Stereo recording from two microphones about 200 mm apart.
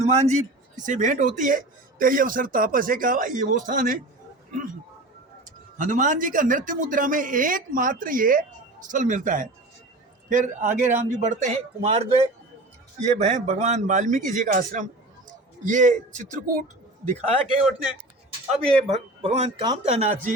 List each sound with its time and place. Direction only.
0.0 s a man's voice: 35° right (ahead or behind)
5.5 s a man's voice: 40° right (ahead or behind)
18.9 s a man's voice: 30° right (ahead or behind)